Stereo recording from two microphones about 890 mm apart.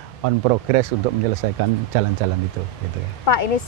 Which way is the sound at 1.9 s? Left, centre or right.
Right.